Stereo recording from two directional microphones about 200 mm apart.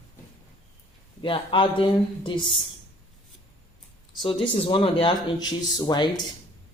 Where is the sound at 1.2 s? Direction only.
25° left (ahead or behind).